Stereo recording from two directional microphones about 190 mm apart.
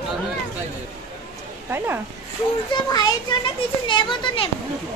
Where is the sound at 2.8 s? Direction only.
20° left (ahead or behind).